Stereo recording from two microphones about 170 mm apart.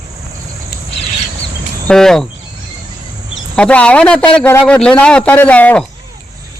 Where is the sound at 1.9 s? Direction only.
5° left (ahead or behind).